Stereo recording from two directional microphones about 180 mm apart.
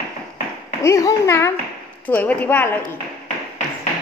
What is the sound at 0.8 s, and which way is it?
A woman's voice, 15° left (ahead or behind).